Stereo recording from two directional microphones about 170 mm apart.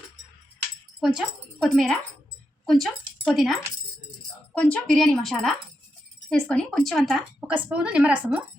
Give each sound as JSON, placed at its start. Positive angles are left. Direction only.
{"t": 0.9, "sound": "a woman's voice", "side_deg": 0}